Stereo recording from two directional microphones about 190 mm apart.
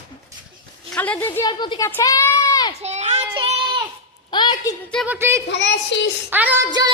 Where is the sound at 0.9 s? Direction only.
10° left (ahead or behind).